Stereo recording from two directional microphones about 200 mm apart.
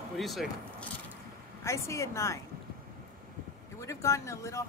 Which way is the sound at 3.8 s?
15° left (ahead or behind).